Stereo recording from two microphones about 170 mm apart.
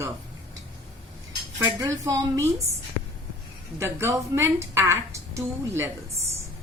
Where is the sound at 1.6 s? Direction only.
20° right (ahead or behind).